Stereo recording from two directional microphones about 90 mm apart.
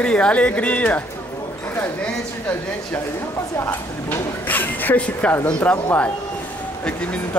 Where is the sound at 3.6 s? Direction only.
25° left (ahead or behind).